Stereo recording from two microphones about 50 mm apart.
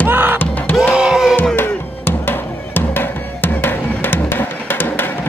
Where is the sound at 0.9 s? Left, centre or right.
Right.